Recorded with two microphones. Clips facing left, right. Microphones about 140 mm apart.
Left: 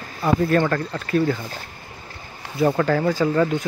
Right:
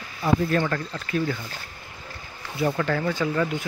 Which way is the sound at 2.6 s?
45° left (ahead or behind).